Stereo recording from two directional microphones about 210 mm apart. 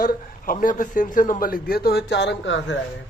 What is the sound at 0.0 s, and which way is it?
A man's voice, 40° left (ahead or behind).